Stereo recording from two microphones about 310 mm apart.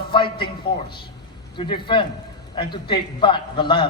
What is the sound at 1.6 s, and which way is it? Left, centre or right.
A man's voice, centre.